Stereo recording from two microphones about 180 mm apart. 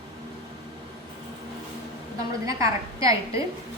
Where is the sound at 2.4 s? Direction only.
20° right (ahead or behind).